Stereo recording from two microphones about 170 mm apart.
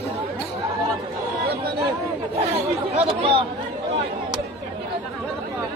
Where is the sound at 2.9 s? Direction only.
35° right (ahead or behind).